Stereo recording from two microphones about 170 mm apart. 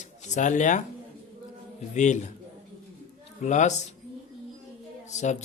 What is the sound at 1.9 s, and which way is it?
Speech, 45° left (ahead or behind).